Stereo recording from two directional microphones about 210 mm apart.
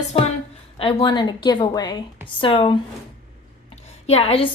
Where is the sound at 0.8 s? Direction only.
25° left (ahead or behind).